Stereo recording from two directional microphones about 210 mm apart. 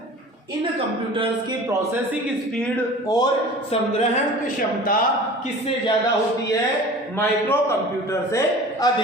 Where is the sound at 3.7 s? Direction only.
30° left (ahead or behind).